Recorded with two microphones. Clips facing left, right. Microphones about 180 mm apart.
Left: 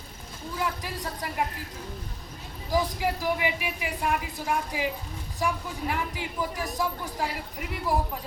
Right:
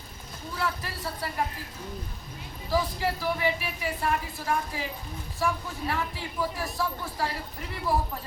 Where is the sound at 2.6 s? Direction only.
15° left (ahead or behind).